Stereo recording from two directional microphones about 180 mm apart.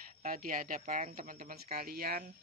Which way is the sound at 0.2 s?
50° right (ahead or behind).